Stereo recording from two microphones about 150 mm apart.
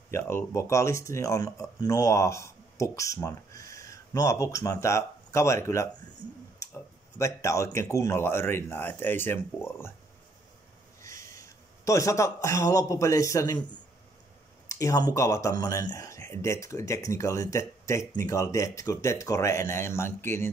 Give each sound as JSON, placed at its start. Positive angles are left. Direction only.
{"t": 0.1, "sound": "speech", "side_deg": 15}
{"t": 11.4, "sound": "a man's voice", "side_deg": 20}
{"t": 14.7, "sound": "speech", "side_deg": 20}